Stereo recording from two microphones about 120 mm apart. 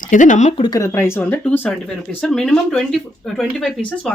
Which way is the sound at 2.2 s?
5° left (ahead or behind).